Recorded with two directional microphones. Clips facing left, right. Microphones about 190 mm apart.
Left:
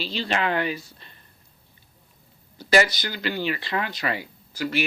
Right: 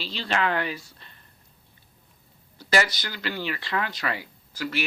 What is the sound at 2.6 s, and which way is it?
Speech, 15° left (ahead or behind).